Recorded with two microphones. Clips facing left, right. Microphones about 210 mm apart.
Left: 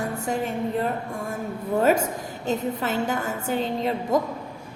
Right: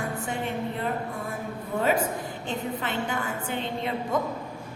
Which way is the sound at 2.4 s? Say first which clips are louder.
Left 7 dB; 40° left (ahead or behind).